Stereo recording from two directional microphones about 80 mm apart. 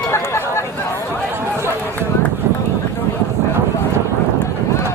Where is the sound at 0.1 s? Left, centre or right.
Left.